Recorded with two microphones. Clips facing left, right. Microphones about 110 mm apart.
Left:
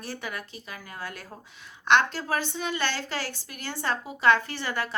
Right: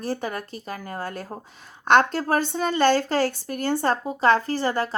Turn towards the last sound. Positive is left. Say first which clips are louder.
# right 8 dB
turn(degrees=-35)  # may be behind; listen again after turning